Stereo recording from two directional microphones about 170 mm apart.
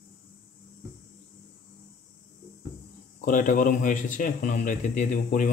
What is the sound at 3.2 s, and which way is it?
Speech, 50° left (ahead or behind).